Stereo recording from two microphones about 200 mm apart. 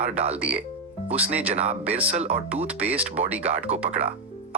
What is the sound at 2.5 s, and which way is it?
Speech, 5° right (ahead or behind).